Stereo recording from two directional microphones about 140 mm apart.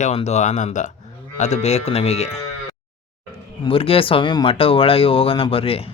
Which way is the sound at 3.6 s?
40° left (ahead or behind).